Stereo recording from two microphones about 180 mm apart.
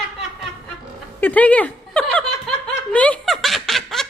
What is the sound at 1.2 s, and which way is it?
Speech, 10° left (ahead or behind).